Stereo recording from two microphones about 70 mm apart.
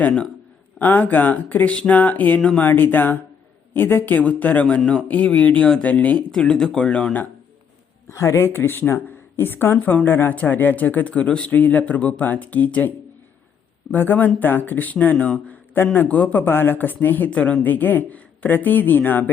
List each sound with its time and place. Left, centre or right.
0.8 s speech: left
4.8 s speech: centre
6.4 s speech: centre
8.0 s speech: left
13.9 s speech: left